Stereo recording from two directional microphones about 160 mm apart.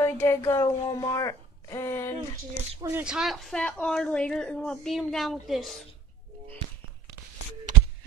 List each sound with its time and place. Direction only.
0.0 s speech: 20° left (ahead or behind)
2.8 s a woman's voice: 10° right (ahead or behind)